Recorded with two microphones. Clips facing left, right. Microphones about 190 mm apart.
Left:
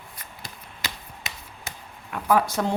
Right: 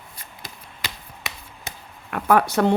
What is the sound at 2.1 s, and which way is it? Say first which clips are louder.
Speech: right 3 dB; 65° right (ahead or behind).